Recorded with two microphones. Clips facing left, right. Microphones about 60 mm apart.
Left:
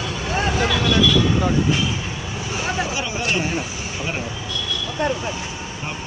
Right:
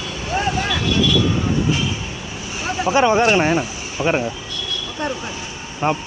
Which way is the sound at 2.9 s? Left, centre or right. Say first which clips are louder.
Right 9 dB; right.